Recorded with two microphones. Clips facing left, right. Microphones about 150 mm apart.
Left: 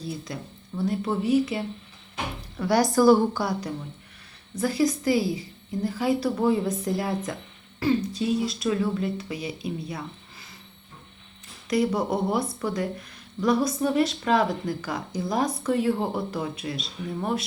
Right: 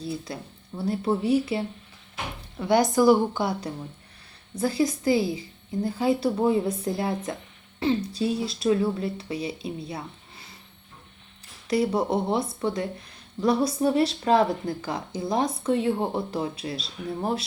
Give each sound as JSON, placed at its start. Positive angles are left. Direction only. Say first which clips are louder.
{"t": 0.0, "sound": "speech", "louder": "right 1 dB", "side_deg": -25}
{"t": 11.7, "sound": "speech", "louder": "right 1 dB", "side_deg": -30}